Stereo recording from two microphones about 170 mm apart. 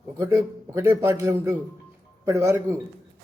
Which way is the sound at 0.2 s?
20° right (ahead or behind).